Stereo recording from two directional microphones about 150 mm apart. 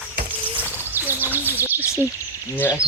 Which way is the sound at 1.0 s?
15° right (ahead or behind).